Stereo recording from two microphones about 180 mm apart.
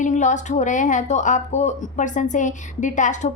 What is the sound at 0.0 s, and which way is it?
Speech, 45° left (ahead or behind).